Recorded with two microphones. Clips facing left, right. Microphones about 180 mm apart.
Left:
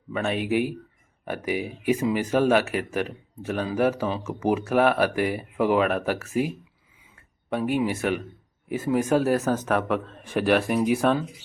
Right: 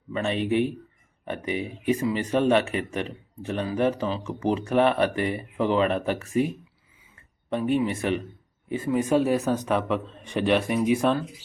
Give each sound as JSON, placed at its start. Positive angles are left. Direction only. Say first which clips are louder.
{"t": 0.1, "sound": "speech", "louder": "even", "side_deg": 5}
{"t": 7.5, "sound": "speech", "louder": "even", "side_deg": 5}
{"t": 8.8, "sound": "speech", "louder": "left 1 dB", "side_deg": 80}
{"t": 9.0, "sound": "speech", "louder": "right 1 dB", "side_deg": 0}